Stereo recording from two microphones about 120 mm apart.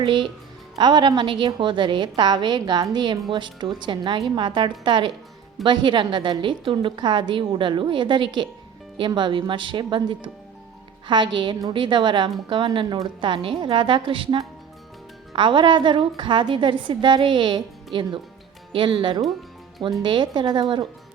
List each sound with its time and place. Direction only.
0.0 s a woman's voice: 45° right (ahead or behind)
18.7 s a woman's voice: 45° right (ahead or behind)